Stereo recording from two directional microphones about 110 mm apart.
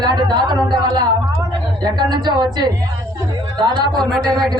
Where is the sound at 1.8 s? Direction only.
40° right (ahead or behind).